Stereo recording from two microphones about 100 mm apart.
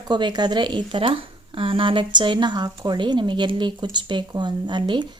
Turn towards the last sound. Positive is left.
turn(degrees=-50)  # may be behind; listen again after turning